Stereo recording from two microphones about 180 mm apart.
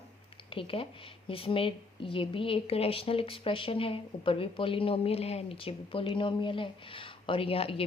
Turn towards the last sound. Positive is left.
turn(degrees=30)  # may be behind; listen again after turning